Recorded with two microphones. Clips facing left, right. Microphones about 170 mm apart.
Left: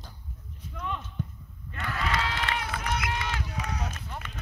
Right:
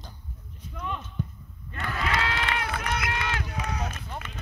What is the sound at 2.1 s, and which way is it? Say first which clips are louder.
Run: right 2 dB; 70° right (ahead or behind).